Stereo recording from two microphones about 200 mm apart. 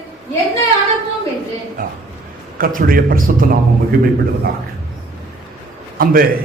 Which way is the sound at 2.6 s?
45° right (ahead or behind).